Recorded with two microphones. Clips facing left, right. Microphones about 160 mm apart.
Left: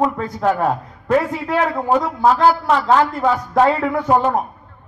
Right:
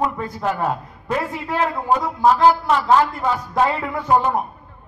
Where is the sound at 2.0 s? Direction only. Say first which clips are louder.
Left 1 dB; 50° left (ahead or behind).